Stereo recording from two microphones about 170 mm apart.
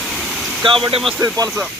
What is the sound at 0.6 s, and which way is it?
Speech, 30° right (ahead or behind).